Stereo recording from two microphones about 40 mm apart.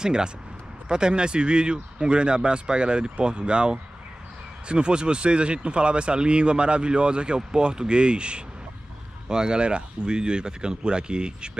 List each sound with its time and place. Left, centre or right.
0.0 s speech: right